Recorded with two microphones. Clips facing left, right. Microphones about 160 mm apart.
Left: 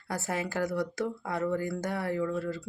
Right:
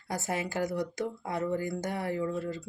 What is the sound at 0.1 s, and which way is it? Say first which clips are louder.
Speech: even; 20° right (ahead or behind).